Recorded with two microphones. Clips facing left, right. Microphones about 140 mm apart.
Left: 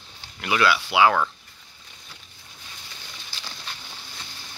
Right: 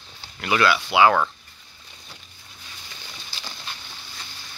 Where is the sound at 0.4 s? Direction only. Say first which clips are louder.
Right 1 dB; 5° left (ahead or behind).